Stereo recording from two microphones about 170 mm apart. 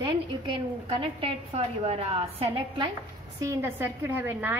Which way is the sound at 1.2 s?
35° right (ahead or behind).